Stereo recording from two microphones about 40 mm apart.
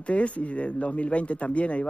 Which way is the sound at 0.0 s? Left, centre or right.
Left.